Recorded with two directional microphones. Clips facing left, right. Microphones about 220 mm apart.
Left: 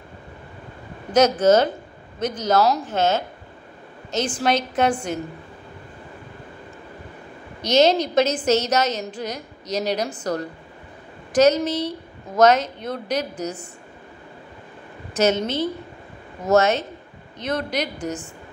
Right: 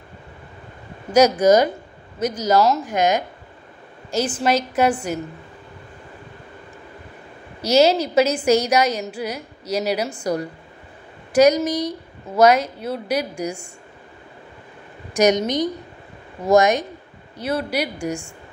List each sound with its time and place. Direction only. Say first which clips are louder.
1.1 s a woman's voice: right 2 dB; 10° right (ahead or behind)
7.6 s a woman's voice: right 1 dB; 10° right (ahead or behind)
15.1 s a woman's voice: right 3 dB; 15° right (ahead or behind)